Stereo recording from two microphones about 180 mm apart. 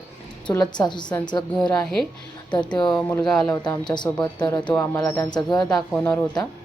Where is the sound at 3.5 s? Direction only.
20° left (ahead or behind).